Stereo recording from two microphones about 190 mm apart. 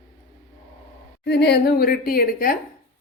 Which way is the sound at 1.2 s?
60° left (ahead or behind).